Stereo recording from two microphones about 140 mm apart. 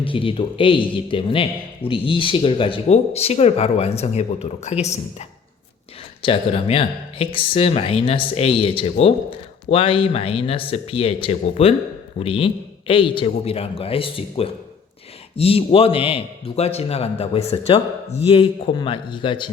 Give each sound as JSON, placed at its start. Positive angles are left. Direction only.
{"t": 0.0, "sound": "a man's voice", "side_deg": 40}
{"t": 6.2, "sound": "a man's voice", "side_deg": 40}